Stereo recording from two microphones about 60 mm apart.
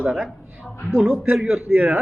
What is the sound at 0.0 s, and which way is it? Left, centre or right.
A man's voice, centre.